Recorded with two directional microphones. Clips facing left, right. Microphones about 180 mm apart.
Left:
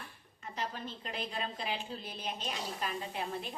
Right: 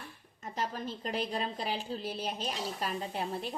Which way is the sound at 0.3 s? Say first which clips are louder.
Right 4 dB; 40° right (ahead or behind).